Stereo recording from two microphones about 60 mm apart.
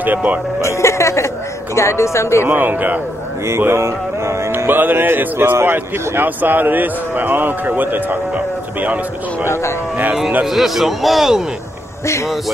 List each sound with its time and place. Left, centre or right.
0.0 s speech: right
0.6 s music: left
1.8 s speech: left
2.4 s speech: right
3.4 s music: right
4.6 s speech: right
9.5 s speech: left
10.4 s a man's voice: centre